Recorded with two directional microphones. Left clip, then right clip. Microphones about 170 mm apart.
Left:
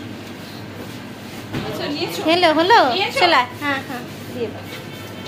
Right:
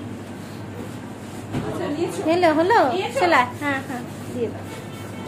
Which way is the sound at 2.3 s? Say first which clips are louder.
Left 4 dB; 5° right (ahead or behind).